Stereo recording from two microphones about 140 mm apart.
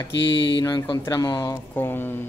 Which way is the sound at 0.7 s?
35° left (ahead or behind).